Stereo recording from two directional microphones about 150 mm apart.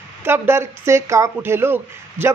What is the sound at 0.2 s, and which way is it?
Speech, 15° right (ahead or behind).